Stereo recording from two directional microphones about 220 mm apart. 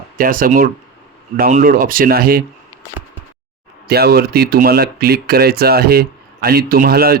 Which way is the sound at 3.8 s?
45° right (ahead or behind).